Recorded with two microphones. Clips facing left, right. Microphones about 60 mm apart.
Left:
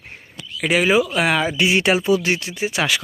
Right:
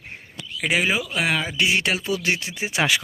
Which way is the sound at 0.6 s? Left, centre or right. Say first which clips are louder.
Left 6 dB; centre.